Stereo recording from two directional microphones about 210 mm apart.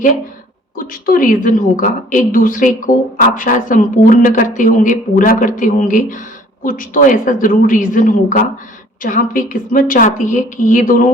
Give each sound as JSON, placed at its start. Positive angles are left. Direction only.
{"t": 0.8, "sound": "a woman's voice", "side_deg": 40}